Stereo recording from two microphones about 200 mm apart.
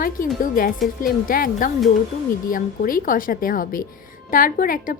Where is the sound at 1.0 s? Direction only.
45° left (ahead or behind).